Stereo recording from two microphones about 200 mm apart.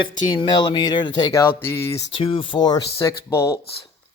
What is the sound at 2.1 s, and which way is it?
Speech, 25° left (ahead or behind).